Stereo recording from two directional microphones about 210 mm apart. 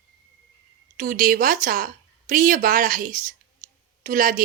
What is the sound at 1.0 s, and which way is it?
A woman's voice, 40° right (ahead or behind).